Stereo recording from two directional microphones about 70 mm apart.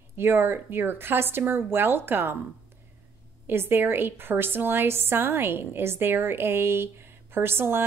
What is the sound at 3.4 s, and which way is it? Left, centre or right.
A woman's voice, right.